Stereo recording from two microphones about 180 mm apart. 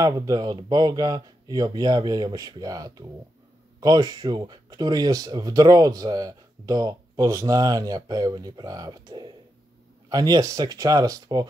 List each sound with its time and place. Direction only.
0.0 s speech: 20° right (ahead or behind)